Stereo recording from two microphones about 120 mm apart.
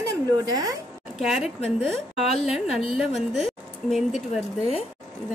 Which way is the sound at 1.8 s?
Centre (ahead or behind).